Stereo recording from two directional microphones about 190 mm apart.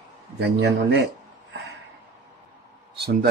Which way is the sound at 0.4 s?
65° right (ahead or behind).